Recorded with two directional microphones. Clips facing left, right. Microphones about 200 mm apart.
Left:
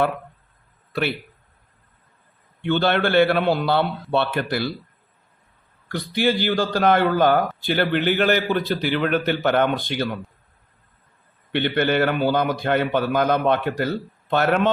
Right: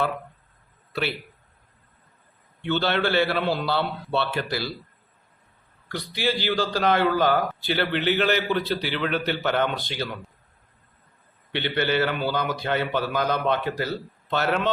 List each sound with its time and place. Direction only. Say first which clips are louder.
2.6 s a man's voice: left 4 dB; 55° left (ahead or behind)
5.9 s a man's voice: left 5 dB; 50° left (ahead or behind)
11.5 s a man's voice: left 4 dB; 55° left (ahead or behind)